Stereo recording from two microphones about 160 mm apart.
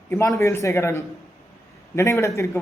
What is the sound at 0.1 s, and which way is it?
A man's voice, 15° left (ahead or behind).